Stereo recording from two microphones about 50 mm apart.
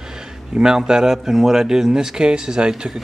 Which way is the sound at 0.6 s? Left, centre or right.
Centre.